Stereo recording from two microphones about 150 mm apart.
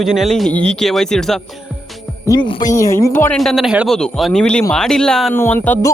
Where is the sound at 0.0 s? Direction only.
Centre (ahead or behind).